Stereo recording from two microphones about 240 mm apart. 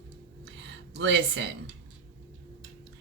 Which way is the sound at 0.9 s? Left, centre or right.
Right.